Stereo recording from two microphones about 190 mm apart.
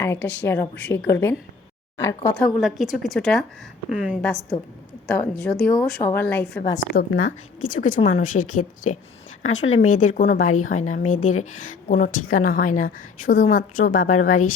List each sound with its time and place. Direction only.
0.0 s a woman's voice: 10° left (ahead or behind)
2.3 s a woman's voice: centre (ahead or behind)
6.8 s a woman's voice: 65° left (ahead or behind)
7.2 s a woman's voice: 45° left (ahead or behind)
9.6 s speech: 90° left
9.9 s a woman's voice: 45° left (ahead or behind)